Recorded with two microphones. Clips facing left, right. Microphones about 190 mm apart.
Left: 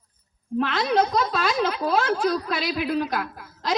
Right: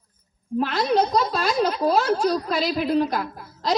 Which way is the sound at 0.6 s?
45° right (ahead or behind).